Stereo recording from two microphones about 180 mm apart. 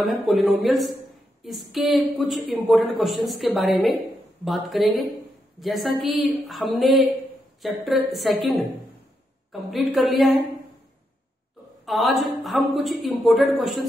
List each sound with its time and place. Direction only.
0.0 s a woman's voice: centre (ahead or behind)
11.8 s a woman's voice: centre (ahead or behind)